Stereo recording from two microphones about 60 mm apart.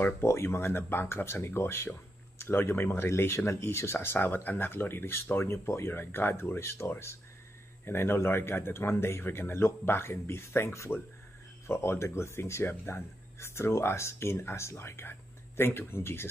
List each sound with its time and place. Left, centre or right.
0.2 s speech: left